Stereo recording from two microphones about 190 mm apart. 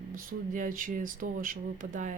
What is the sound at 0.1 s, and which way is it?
A woman's voice, 45° right (ahead or behind).